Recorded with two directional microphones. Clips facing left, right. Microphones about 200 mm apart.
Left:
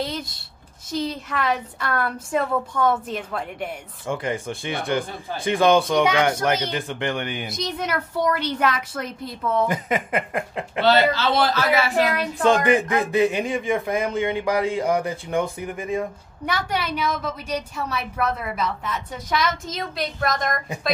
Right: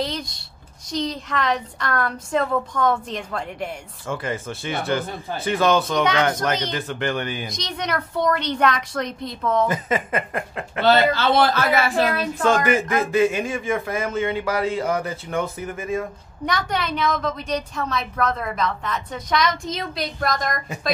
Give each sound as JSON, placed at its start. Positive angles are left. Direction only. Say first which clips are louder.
{"t": 0.0, "sound": "a sound", "louder": "right 1 dB", "side_deg": 0}
{"t": 0.9, "sound": "speech", "louder": "right 1 dB", "side_deg": 5}
{"t": 4.1, "sound": "speech", "louder": "left 1 dB", "side_deg": 15}
{"t": 7.4, "sound": "speech", "louder": "left 1 dB", "side_deg": 5}
{"t": 11.1, "sound": "speech", "louder": "right 2 dB", "side_deg": -55}
{"t": 12.2, "sound": "speech", "louder": "left 1 dB", "side_deg": 15}